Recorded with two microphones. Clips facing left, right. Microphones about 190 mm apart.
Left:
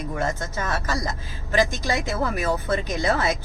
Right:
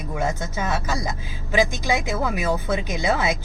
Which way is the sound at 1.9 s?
15° right (ahead or behind).